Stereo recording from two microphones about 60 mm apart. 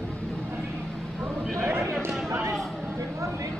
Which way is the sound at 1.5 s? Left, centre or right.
Right.